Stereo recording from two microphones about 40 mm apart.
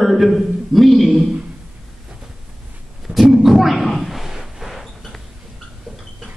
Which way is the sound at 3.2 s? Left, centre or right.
Centre.